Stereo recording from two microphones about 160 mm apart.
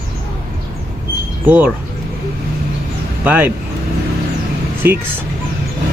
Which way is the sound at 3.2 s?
10° right (ahead or behind).